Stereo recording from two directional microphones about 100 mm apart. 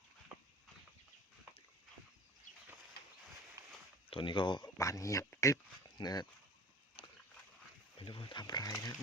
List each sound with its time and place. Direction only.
3.6 s a sound: 35° right (ahead or behind)
4.1 s speech: 55° left (ahead or behind)
4.8 s speech: 30° left (ahead or behind)
7.9 s speech: 65° left (ahead or behind); by 9.0 s 40° left (ahead or behind)